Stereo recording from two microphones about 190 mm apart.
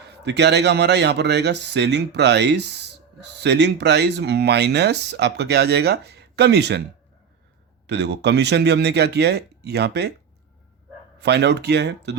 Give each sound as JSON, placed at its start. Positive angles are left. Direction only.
{"t": 0.0, "sound": "a man's voice", "side_deg": -65}
{"t": 7.9, "sound": "a man's voice", "side_deg": -65}
{"t": 11.2, "sound": "a man's voice", "side_deg": -60}